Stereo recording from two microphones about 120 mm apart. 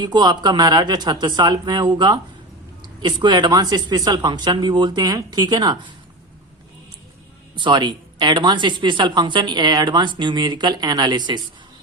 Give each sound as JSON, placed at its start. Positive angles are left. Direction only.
{"t": 0.0, "sound": "speech", "side_deg": -35}
{"t": 7.5, "sound": "speech", "side_deg": -40}